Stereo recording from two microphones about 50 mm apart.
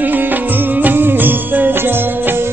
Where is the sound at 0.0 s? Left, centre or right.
Right.